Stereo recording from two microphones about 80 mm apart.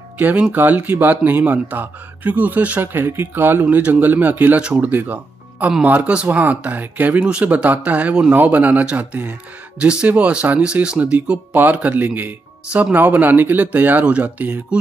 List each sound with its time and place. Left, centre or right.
0.2 s speech: centre